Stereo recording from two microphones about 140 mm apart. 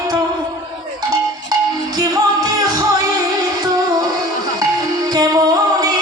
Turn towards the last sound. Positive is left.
turn(degrees=-25)  # may be behind; listen again after turning